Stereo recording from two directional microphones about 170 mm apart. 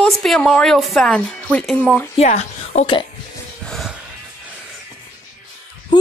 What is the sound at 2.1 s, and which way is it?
Speech, 40° left (ahead or behind).